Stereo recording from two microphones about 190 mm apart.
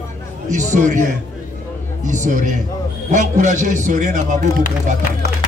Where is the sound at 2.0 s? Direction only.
40° right (ahead or behind).